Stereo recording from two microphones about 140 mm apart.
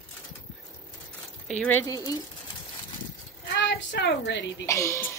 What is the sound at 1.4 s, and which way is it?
Speech, 10° left (ahead or behind).